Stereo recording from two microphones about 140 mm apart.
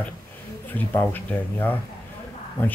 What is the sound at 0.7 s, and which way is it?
Speech, 15° left (ahead or behind).